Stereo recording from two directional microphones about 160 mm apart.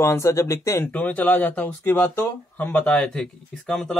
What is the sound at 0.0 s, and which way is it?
Speech, 20° left (ahead or behind).